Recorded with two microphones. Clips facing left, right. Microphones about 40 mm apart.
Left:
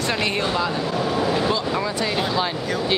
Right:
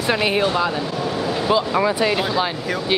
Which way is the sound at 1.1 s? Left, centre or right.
Centre.